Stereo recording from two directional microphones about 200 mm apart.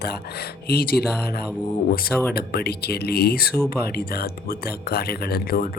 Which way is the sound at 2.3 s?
50° left (ahead or behind).